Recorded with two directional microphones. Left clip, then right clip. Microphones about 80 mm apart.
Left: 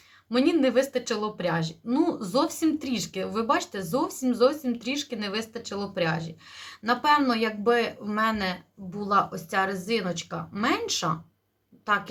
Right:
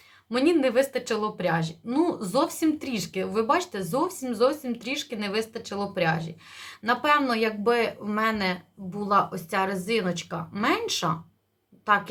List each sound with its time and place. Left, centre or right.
0.3 s a woman's voice: right